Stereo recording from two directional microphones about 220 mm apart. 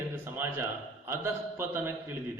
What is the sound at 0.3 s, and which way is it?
A man's voice, 10° right (ahead or behind).